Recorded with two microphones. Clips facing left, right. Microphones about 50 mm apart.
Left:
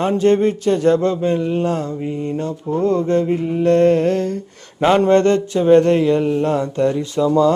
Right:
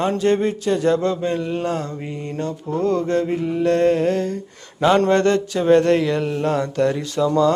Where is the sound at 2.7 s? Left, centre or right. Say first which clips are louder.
Left 3 dB; left.